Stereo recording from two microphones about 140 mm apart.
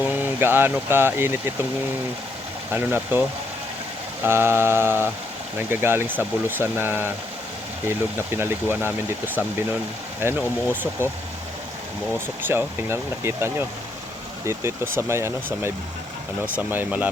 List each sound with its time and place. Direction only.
0.0 s speech: 15° right (ahead or behind)
2.7 s speech: 15° right (ahead or behind)
4.2 s speech: 15° right (ahead or behind)
12.5 s speech: 15° right (ahead or behind)
14.9 s speech: 20° right (ahead or behind)